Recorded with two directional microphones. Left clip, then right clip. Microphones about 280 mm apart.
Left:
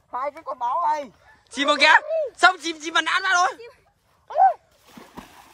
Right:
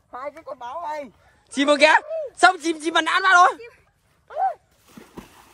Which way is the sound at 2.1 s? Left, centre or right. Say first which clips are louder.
Left 4 dB; left.